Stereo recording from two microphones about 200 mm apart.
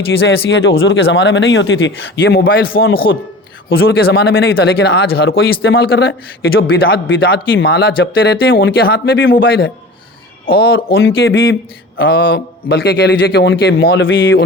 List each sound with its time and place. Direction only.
0.3 s speech: 65° left (ahead or behind)
11.9 s a man's voice: 55° left (ahead or behind)